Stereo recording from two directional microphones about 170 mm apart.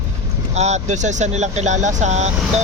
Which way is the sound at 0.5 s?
40° right (ahead or behind).